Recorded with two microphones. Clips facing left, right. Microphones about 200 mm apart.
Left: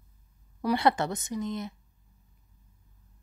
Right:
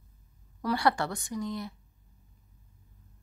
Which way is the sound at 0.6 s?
20° left (ahead or behind).